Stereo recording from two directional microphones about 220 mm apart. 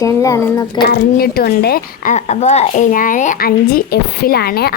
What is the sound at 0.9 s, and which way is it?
Speech, 45° left (ahead or behind).